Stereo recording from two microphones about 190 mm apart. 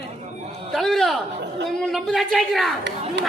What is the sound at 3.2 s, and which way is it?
Speech, 65° right (ahead or behind).